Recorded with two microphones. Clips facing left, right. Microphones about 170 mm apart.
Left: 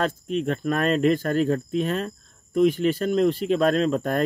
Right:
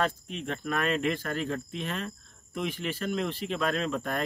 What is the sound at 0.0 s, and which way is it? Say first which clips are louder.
Speech: left 6 dB; 45° left (ahead or behind).